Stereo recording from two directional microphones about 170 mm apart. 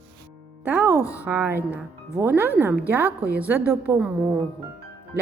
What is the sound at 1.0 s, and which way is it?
Speech, 15° left (ahead or behind).